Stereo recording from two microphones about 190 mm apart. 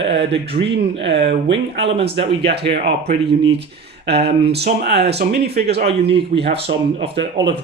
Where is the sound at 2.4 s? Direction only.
60° right (ahead or behind).